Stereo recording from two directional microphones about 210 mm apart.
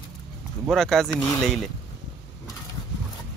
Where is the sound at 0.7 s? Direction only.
Centre (ahead or behind).